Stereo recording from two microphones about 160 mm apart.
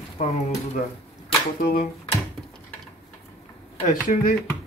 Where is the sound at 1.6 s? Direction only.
65° left (ahead or behind).